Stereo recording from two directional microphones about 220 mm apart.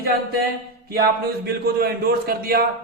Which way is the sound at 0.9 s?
45° right (ahead or behind).